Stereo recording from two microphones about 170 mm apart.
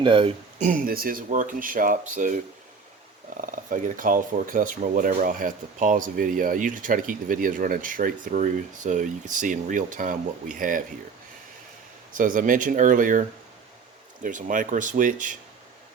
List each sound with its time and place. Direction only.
0.0 s speech: 30° right (ahead or behind)
0.6 s speech: 55° right (ahead or behind)
3.4 s speech: 50° right (ahead or behind)
12.1 s speech: 50° right (ahead or behind)